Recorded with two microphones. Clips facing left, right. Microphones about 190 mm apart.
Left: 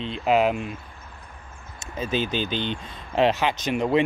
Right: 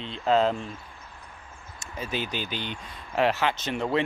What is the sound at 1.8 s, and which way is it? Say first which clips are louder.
Speech: left 6 dB; 20° left (ahead or behind).